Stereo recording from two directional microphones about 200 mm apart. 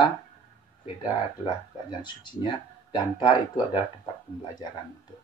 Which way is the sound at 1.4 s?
20° left (ahead or behind).